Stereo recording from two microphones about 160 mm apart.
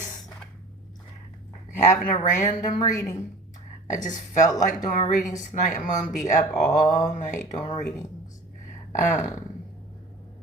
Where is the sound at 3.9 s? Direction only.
50° left (ahead or behind).